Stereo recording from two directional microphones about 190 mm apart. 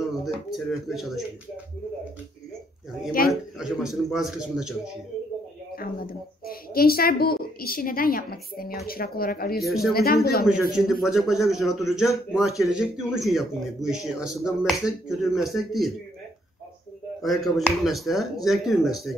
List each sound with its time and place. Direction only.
0.0 s speech: centre (ahead or behind)
3.1 s a woman's voice: 50° left (ahead or behind)
3.5 s speech: centre (ahead or behind)
5.8 s a woman's voice: 50° left (ahead or behind)
10.8 s speech: centre (ahead or behind)
17.2 s speech: centre (ahead or behind)